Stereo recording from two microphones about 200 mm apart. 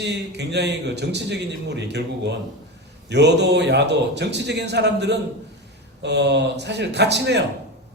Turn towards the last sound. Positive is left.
turn(degrees=-60)  # may be behind; listen again after turning